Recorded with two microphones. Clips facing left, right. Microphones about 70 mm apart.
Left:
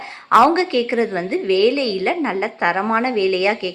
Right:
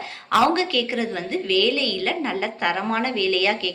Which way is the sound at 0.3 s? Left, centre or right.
Left.